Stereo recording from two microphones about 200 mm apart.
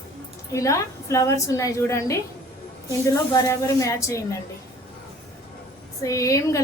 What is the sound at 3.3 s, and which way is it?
Speech, 15° left (ahead or behind).